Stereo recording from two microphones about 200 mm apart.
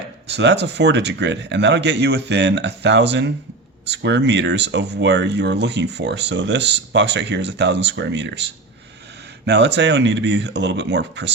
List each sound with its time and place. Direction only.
0.3 s speech: 60° right (ahead or behind)
9.5 s speech: 60° right (ahead or behind)